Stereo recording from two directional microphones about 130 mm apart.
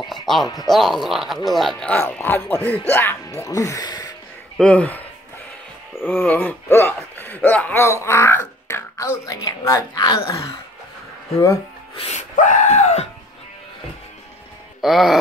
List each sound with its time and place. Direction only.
0.0 s music: centre (ahead or behind)
0.7 s speech: centre (ahead or behind)
2.0 s speech: 15° left (ahead or behind); by 4.1 s 30° left (ahead or behind)
4.6 s speech: 10° left (ahead or behind)
6.0 s speech: 15° left (ahead or behind)
12.0 s a sound: 65° left (ahead or behind)
14.8 s music: centre (ahead or behind)